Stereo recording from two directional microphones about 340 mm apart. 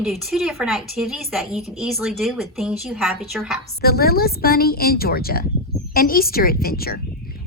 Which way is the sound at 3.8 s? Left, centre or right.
Left.